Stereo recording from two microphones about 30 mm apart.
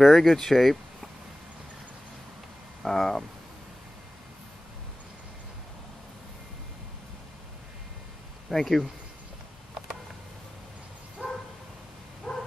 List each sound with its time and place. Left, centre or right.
0.0 s speech: centre
2.8 s speech: centre
8.5 s speech: centre
12.3 s bow-wow: left